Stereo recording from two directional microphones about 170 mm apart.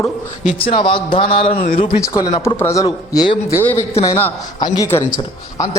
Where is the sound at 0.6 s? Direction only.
30° left (ahead or behind).